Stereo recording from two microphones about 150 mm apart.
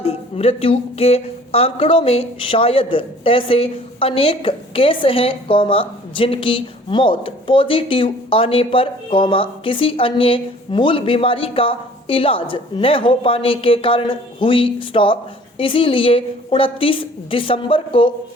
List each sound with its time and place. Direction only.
0.0 s speech: 40° left (ahead or behind)